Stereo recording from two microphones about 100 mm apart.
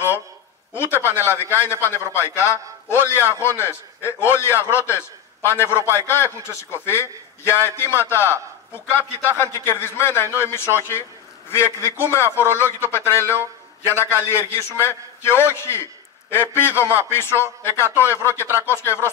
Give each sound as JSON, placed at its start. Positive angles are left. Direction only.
{"t": 0.7, "sound": "a man's voice", "side_deg": 25}
{"t": 9.4, "sound": "a man's voice", "side_deg": 25}